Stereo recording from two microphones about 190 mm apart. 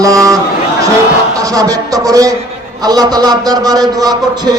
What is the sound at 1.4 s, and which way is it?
A man's voice, 20° right (ahead or behind).